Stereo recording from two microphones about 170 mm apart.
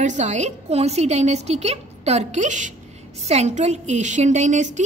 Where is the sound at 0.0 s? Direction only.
45° right (ahead or behind).